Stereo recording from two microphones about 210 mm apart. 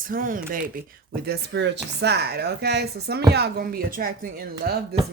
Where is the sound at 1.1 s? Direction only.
50° right (ahead or behind).